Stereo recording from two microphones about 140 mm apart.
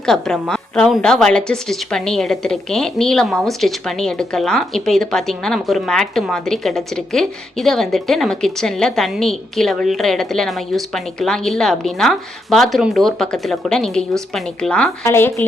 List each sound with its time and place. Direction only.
0.0 s a woman's voice: 5° left (ahead or behind)
15.0 s speech: 20° left (ahead or behind)